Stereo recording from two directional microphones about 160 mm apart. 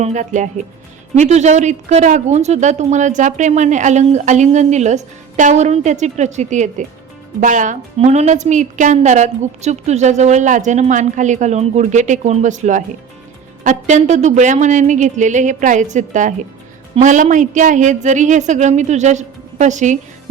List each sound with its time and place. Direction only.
0.0 s a woman's voice: 50° right (ahead or behind)